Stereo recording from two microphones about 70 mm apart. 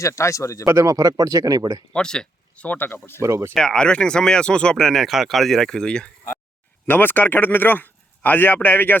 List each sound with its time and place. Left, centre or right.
0.0 s speech: left
0.6 s speech: right
1.9 s speech: centre
2.6 s speech: left
3.2 s speech: right
3.5 s speech: centre
6.8 s speech: left